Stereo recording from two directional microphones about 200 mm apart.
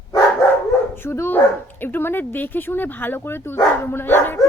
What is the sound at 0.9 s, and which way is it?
Speech, 10° left (ahead or behind).